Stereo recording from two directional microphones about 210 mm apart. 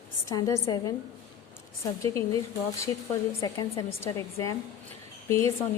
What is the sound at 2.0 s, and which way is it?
Speech, 15° left (ahead or behind).